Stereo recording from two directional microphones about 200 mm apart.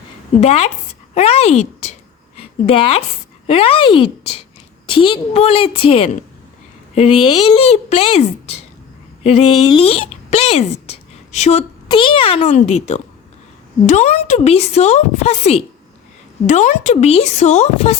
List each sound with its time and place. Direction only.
0.3 s a woman's voice: 30° left (ahead or behind)
1.1 s a sound: 30° left (ahead or behind)
3.4 s a woman's voice: 30° left (ahead or behind)